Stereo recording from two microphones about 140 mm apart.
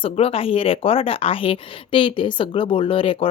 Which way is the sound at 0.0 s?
40° left (ahead or behind).